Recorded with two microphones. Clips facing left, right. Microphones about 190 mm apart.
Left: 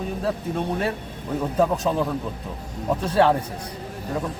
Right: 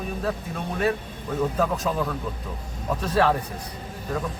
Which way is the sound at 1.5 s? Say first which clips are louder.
Left 4 dB; 30° left (ahead or behind).